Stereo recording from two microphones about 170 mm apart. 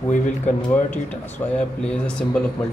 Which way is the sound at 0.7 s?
10° left (ahead or behind).